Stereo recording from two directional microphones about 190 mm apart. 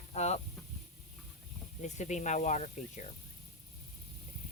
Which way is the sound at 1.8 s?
40° left (ahead or behind).